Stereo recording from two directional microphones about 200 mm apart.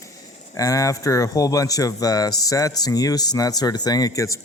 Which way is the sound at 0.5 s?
15° left (ahead or behind).